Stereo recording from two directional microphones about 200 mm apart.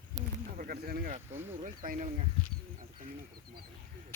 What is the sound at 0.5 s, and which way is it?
Speech, 45° right (ahead or behind).